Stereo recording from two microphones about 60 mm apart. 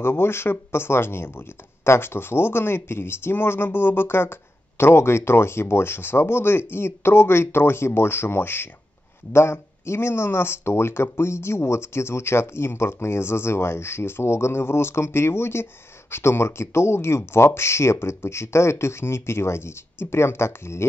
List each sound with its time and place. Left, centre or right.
0.0 s speech: left